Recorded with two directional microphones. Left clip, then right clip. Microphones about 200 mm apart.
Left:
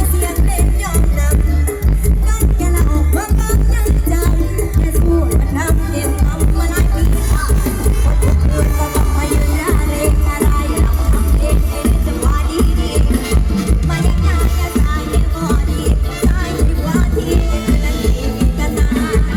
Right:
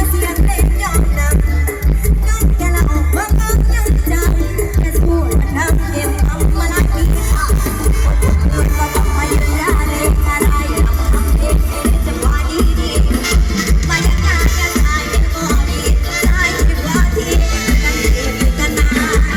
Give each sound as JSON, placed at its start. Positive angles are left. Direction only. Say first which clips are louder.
{"t": 2.7, "sound": "music", "louder": "right 2 dB", "side_deg": 55}
{"t": 9.3, "sound": "music", "louder": "right 1 dB", "side_deg": 50}
{"t": 11.8, "sound": "music", "louder": "even", "side_deg": 45}